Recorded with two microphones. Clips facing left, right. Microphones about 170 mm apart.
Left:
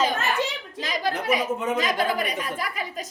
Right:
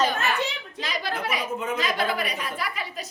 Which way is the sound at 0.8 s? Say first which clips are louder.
Left 3 dB; 45° left (ahead or behind).